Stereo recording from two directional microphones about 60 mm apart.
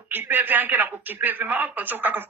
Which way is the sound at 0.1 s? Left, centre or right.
Right.